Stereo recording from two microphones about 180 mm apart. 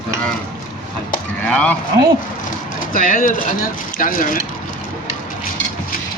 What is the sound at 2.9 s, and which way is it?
Speech, 50° left (ahead or behind).